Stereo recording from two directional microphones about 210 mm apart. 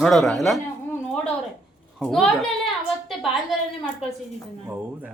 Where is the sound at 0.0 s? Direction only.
Centre (ahead or behind).